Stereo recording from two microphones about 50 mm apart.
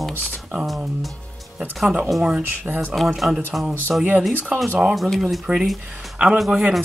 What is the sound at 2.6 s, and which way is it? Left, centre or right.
Speech, right.